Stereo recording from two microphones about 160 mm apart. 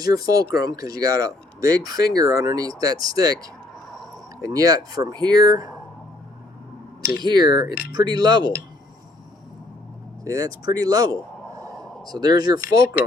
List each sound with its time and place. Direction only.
0.0 s speech: 25° right (ahead or behind)
4.4 s speech: 20° right (ahead or behind)
7.2 s speech: 25° right (ahead or behind)
10.2 s speech: 20° right (ahead or behind)